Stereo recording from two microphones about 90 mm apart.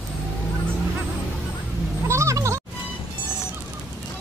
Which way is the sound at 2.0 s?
35° right (ahead or behind).